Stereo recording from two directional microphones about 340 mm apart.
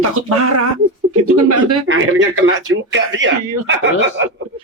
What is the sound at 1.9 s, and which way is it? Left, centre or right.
Speech, right.